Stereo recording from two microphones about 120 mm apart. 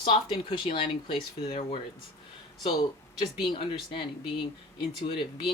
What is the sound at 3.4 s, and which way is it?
Speech, 45° left (ahead or behind).